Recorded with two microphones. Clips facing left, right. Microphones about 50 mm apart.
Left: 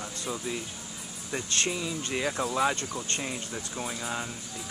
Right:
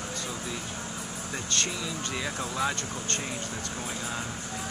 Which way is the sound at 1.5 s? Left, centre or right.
Centre.